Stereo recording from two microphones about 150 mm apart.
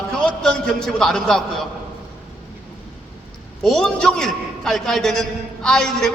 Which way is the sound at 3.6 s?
5° left (ahead or behind).